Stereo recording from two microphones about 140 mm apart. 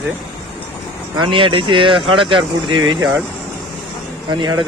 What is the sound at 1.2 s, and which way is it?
Speech, 35° right (ahead or behind).